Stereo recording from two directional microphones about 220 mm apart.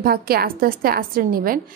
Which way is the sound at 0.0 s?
45° right (ahead or behind).